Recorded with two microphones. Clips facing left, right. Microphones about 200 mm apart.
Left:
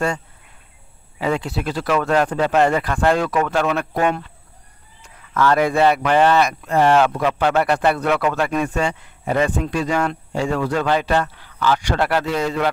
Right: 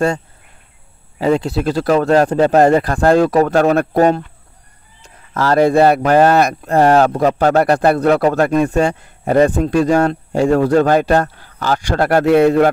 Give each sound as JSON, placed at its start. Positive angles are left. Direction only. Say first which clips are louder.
{"t": 1.1, "sound": "speech", "louder": "right 7 dB", "side_deg": -35}
{"t": 5.3, "sound": "speech", "louder": "right 5 dB", "side_deg": -35}